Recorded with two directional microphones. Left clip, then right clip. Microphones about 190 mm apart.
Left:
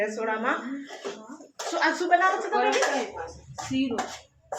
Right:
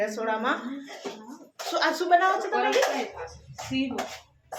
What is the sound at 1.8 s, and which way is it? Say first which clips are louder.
Speech: even; 15° right (ahead or behind).